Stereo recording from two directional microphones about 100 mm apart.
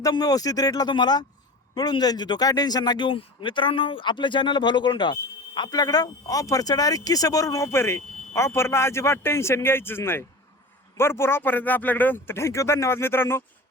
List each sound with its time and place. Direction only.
0.0 s speech: 40° left (ahead or behind)
3.1 s speech: 60° left (ahead or behind); by 13.4 s 25° left (ahead or behind)